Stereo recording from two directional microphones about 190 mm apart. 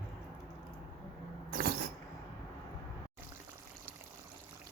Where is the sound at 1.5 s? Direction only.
50° right (ahead or behind).